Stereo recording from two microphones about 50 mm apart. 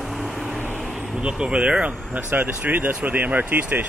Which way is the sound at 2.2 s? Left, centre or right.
Right.